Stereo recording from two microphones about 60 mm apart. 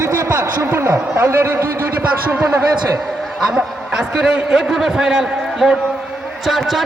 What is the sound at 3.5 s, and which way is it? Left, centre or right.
A man's voice, centre.